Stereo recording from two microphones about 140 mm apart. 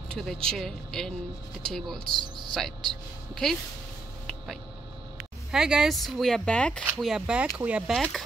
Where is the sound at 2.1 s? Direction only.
30° right (ahead or behind).